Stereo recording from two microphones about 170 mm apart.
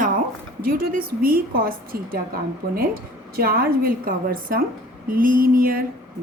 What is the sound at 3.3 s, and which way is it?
A woman's voice, 60° right (ahead or behind).